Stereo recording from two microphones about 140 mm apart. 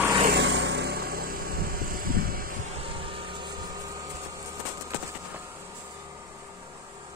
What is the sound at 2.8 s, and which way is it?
Vehicle, 40° right (ahead or behind).